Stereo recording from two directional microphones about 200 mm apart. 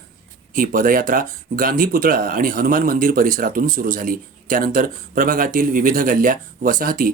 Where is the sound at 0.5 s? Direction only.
45° right (ahead or behind).